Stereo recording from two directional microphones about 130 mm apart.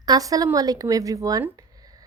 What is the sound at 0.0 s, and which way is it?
A woman's voice, 30° right (ahead or behind).